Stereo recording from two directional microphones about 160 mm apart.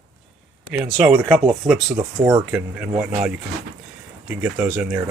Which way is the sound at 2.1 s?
25° right (ahead or behind).